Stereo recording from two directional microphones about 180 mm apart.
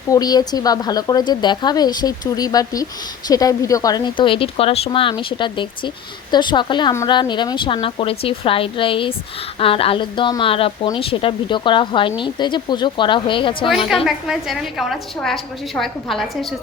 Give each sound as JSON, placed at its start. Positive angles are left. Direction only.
{"t": 0.1, "sound": "a woman's voice", "side_deg": 20}
{"t": 13.8, "sound": "a woman's voice", "side_deg": 0}